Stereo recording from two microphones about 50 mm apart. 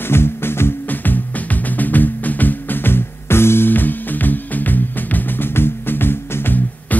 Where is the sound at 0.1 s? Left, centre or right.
Left.